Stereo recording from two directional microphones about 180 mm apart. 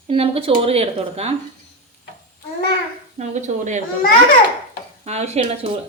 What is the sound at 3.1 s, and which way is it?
Speech, 40° right (ahead or behind).